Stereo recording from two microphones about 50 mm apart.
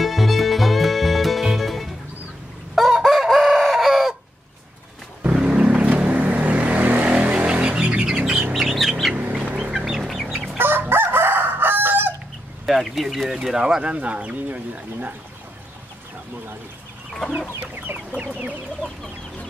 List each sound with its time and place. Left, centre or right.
0.0 s music: centre
2.7 s chicken: centre
5.3 s vehicle: right
7.2 s bird: right
8.5 s bird: centre
9.3 s bird: right
9.7 s chicken: centre
10.6 s chicken: right
12.6 s a sound: centre
13.8 s a sound: right
17.6 s chicken: right